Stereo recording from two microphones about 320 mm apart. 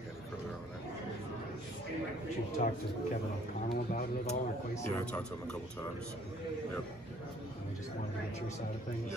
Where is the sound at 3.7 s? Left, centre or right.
Left.